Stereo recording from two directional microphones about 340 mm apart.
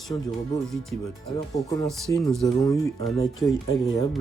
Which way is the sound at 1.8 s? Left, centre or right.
Centre.